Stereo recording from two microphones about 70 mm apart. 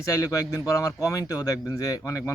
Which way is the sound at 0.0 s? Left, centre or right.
Left.